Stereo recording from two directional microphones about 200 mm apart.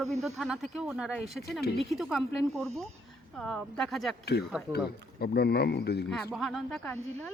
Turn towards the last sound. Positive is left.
turn(degrees=5)  # may be behind; listen again after turning